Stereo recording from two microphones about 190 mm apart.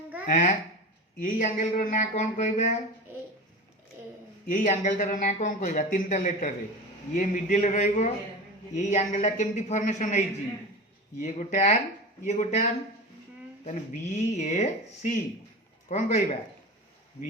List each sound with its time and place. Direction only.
0.3 s speech: 45° left (ahead or behind)
4.4 s speech: 40° left (ahead or behind)
13.7 s speech: 40° left (ahead or behind)